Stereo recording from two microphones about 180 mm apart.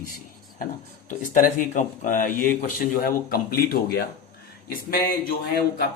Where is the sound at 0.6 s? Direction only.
45° left (ahead or behind).